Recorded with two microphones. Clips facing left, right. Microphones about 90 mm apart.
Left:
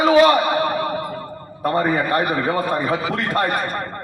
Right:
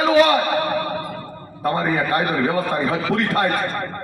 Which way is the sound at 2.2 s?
15° left (ahead or behind).